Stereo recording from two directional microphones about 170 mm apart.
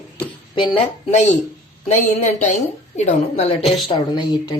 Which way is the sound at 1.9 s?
45° left (ahead or behind).